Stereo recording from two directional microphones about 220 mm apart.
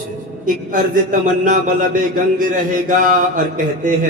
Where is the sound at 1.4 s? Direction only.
35° right (ahead or behind).